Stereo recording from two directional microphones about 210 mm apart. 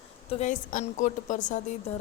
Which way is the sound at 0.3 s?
35° left (ahead or behind).